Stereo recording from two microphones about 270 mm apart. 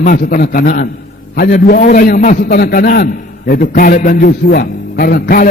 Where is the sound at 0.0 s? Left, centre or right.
Left.